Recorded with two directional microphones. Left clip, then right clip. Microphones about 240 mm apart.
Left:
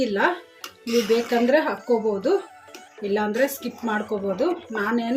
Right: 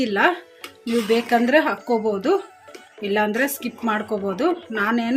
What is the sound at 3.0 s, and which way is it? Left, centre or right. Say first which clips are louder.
Speech: right 2 dB; right.